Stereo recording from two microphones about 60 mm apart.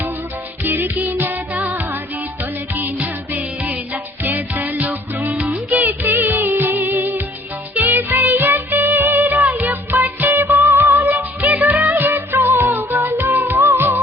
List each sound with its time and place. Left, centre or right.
0.6 s music: right
3.0 s music: right